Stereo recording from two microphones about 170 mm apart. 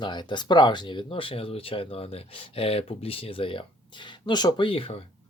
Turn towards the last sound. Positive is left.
turn(degrees=35)  # may be behind; listen again after turning